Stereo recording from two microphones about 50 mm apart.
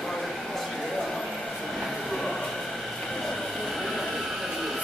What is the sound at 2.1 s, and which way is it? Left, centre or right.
Train, centre.